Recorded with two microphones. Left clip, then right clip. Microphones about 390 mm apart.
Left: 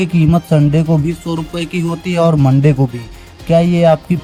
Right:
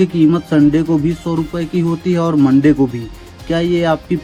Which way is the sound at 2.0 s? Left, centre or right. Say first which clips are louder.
Left 2 dB; left.